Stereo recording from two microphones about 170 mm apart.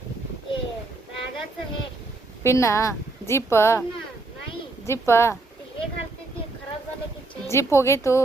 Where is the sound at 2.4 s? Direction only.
15° left (ahead or behind).